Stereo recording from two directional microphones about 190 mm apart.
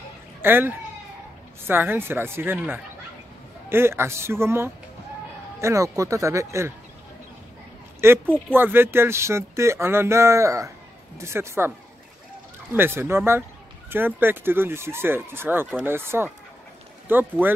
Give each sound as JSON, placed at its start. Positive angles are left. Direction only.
{"t": 0.4, "sound": "speech", "side_deg": -10}
{"t": 8.0, "sound": "speech", "side_deg": -10}
{"t": 12.7, "sound": "speech", "side_deg": -10}